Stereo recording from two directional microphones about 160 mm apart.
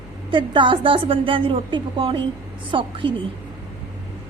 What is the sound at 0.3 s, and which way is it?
A woman's voice, 30° right (ahead or behind).